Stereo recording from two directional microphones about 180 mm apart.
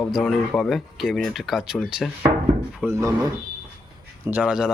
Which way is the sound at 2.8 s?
15° right (ahead or behind).